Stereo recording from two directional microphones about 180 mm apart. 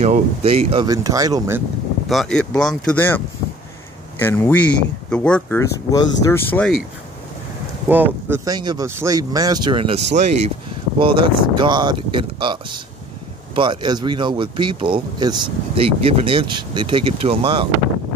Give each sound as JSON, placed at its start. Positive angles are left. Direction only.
{"t": 0.0, "sound": "speech", "side_deg": -35}
{"t": 0.8, "sound": "speech", "side_deg": -20}
{"t": 2.0, "sound": "speech", "side_deg": 0}
{"t": 4.2, "sound": "speech", "side_deg": 15}
{"t": 5.9, "sound": "speech", "side_deg": 20}
{"t": 6.5, "sound": "speech", "side_deg": 5}
{"t": 7.9, "sound": "speech", "side_deg": -10}
{"t": 8.5, "sound": "speech", "side_deg": -20}
{"t": 11.0, "sound": "speech", "side_deg": -30}